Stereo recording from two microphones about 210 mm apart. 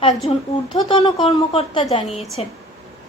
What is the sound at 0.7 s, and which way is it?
A woman's voice, 30° left (ahead or behind).